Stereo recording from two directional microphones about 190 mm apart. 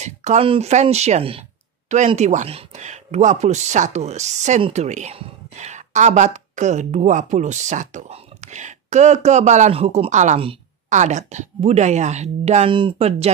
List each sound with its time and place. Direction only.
0.0 s speech: 35° right (ahead or behind)